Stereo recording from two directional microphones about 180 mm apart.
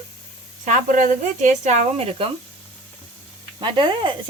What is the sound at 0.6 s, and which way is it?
Speech, 45° right (ahead or behind).